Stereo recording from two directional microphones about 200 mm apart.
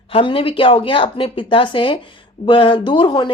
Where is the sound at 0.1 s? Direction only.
25° left (ahead or behind).